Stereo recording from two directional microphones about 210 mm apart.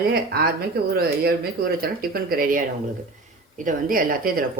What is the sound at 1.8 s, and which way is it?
Speech, 45° right (ahead or behind).